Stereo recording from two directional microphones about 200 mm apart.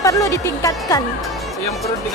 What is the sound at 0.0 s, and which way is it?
A woman's voice, 15° left (ahead or behind).